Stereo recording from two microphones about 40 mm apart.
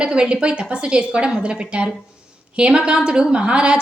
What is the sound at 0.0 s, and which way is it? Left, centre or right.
A woman's voice, right.